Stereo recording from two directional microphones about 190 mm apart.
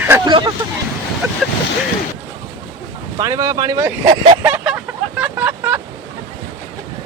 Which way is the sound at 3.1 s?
15° right (ahead or behind).